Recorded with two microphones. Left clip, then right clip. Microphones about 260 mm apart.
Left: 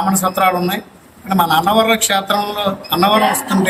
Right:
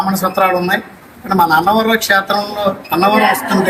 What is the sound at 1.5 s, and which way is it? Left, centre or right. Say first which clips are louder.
Speech: right 1 dB; centre.